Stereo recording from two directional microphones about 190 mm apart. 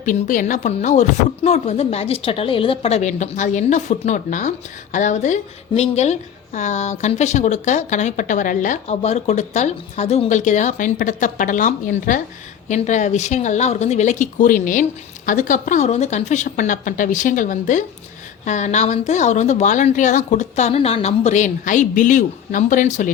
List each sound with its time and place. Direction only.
0.0 s speech: 45° left (ahead or behind)